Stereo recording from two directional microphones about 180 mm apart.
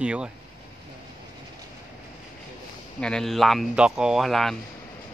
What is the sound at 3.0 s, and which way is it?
Speech, 5° left (ahead or behind).